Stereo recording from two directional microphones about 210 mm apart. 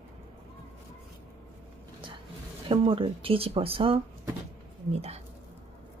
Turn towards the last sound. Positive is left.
turn(degrees=-30)  # may be behind; listen again after turning